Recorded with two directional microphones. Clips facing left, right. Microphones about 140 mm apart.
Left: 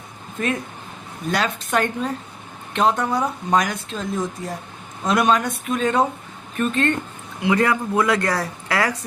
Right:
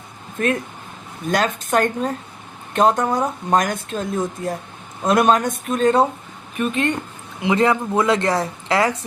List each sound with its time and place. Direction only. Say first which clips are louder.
0.4 s speech: right 3 dB; 55° right (ahead or behind)
5.0 s speech: right 3 dB; 50° right (ahead or behind)
6.6 s speech: even; 15° right (ahead or behind)